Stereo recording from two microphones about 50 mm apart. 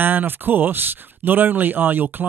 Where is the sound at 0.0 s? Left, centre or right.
Right.